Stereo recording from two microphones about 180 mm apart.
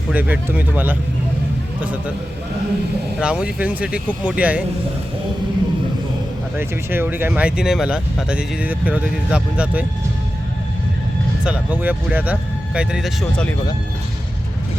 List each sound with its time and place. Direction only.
0.1 s speech: 10° right (ahead or behind)
3.2 s speech: 5° right (ahead or behind)
6.6 s speech: 10° right (ahead or behind)
11.4 s speech: 10° right (ahead or behind)